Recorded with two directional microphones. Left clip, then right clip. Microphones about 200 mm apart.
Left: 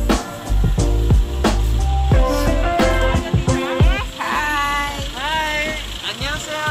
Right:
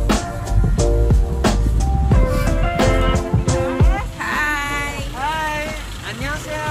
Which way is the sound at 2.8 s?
Centre (ahead or behind).